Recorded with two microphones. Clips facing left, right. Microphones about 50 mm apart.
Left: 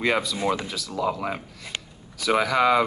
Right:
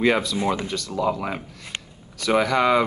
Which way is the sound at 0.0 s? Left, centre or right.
Centre.